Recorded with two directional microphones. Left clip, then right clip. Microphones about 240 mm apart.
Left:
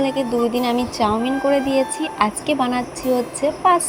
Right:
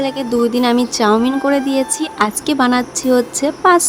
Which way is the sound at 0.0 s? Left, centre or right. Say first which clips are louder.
Right 3 dB; centre.